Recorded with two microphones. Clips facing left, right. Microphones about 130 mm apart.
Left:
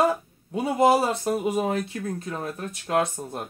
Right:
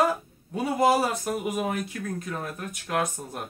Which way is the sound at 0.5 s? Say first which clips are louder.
Left 2 dB; 25° left (ahead or behind).